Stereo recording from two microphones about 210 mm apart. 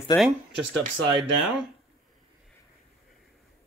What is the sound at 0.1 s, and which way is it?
Speech, 10° left (ahead or behind).